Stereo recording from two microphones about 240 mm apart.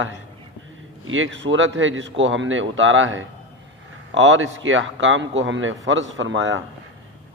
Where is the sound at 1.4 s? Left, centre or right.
Right.